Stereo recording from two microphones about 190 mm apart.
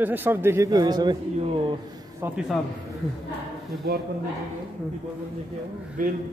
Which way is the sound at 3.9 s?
55° right (ahead or behind).